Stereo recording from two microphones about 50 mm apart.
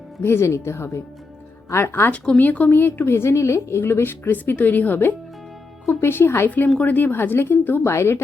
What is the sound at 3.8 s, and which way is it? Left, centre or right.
Speech, left.